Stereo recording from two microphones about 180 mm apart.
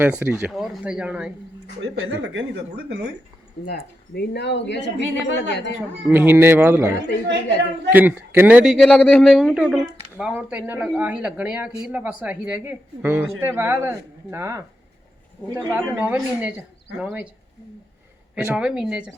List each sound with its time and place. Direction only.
0.0 s a man's voice: 10° right (ahead or behind)
1.8 s speech: 90° right
3.7 s speech: 60° left (ahead or behind)
6.1 s a man's voice: 10° right (ahead or behind)
18.3 s speech: 5° right (ahead or behind)